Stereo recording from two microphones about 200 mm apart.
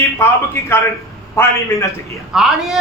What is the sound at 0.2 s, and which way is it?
Speech, 15° left (ahead or behind).